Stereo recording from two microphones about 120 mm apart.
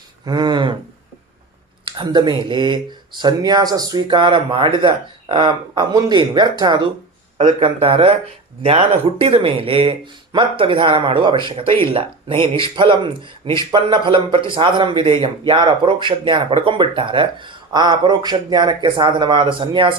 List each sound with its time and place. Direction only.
0.3 s speech: 35° right (ahead or behind)
1.8 s speech: 40° right (ahead or behind)
7.6 s speech: 50° right (ahead or behind)